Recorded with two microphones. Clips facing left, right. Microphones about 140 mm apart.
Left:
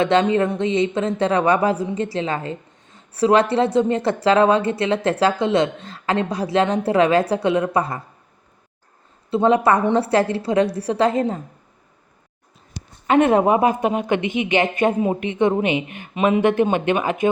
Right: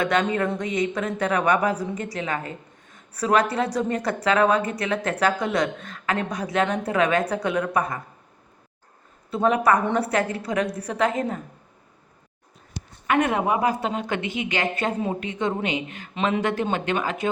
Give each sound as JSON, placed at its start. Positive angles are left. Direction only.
{"t": 0.0, "sound": "speech", "side_deg": 25}
{"t": 9.3, "sound": "speech", "side_deg": 25}
{"t": 13.1, "sound": "speech", "side_deg": 25}